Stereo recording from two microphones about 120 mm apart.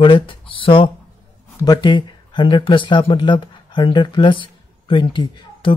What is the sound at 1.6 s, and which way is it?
Speech, 35° left (ahead or behind).